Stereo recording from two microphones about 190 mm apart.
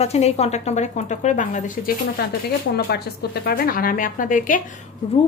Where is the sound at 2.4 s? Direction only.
55° left (ahead or behind).